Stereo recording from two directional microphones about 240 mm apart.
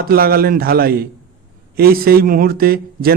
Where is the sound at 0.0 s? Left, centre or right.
Right.